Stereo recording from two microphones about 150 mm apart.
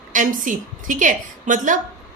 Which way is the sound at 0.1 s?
60° right (ahead or behind).